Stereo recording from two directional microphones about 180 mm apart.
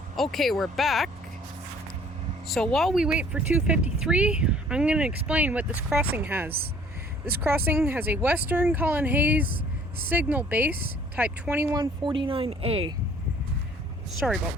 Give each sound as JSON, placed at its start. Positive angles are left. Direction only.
{"t": 0.2, "sound": "speech", "side_deg": 0}
{"t": 2.5, "sound": "speech", "side_deg": 0}
{"t": 11.7, "sound": "speech", "side_deg": -25}
{"t": 14.2, "sound": "speech", "side_deg": 0}